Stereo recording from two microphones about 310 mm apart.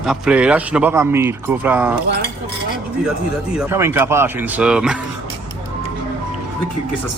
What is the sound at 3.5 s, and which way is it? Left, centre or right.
Speech, centre.